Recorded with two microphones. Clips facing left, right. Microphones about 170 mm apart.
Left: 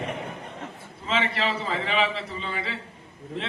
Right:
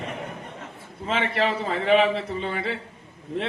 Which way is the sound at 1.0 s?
55° right (ahead or behind).